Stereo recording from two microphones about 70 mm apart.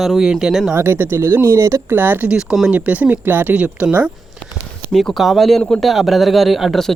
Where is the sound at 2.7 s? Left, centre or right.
Centre.